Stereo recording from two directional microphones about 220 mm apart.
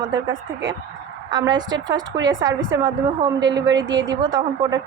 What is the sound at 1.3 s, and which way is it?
Speech, 20° right (ahead or behind).